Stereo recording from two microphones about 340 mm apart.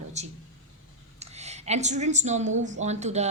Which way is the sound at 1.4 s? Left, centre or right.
Centre.